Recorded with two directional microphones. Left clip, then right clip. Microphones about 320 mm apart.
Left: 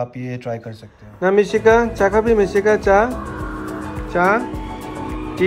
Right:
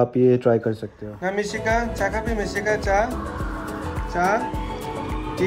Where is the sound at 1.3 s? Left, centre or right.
Right.